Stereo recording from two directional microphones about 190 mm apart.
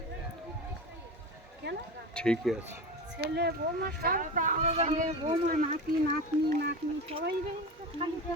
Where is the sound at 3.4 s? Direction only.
55° right (ahead or behind).